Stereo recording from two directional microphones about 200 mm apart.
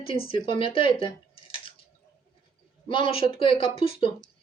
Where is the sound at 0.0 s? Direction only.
25° left (ahead or behind).